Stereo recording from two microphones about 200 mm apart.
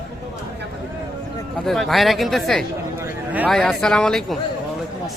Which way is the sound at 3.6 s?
5° left (ahead or behind).